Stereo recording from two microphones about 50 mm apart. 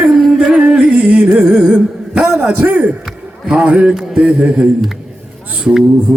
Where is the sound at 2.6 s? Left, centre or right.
Right.